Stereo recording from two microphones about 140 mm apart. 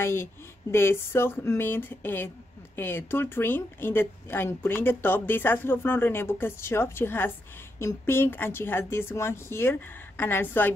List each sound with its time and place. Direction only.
0.0 s speech: 20° left (ahead or behind)